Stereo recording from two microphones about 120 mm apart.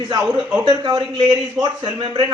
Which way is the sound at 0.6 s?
40° right (ahead or behind).